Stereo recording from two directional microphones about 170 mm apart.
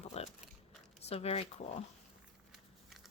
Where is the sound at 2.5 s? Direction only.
Centre (ahead or behind).